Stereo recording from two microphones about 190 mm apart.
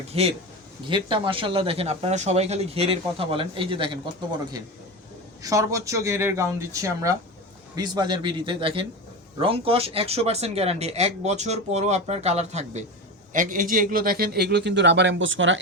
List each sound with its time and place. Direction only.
0.1 s speech: 30° right (ahead or behind)
5.4 s a man's voice: 15° right (ahead or behind); by 15.5 s 85° right